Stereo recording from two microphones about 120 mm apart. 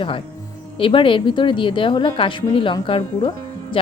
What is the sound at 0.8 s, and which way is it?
A woman's voice, 45° left (ahead or behind).